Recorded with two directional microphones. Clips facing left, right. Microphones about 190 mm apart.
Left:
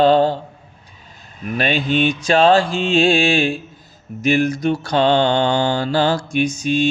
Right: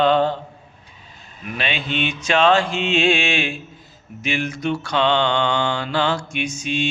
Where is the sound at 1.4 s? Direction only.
40° left (ahead or behind).